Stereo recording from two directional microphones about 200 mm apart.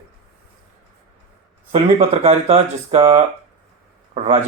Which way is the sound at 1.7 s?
35° right (ahead or behind).